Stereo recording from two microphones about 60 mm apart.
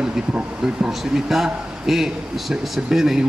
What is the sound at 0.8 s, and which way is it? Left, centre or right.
A man's voice, centre.